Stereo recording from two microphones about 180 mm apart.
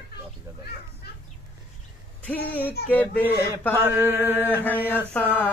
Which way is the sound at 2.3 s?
10° left (ahead or behind).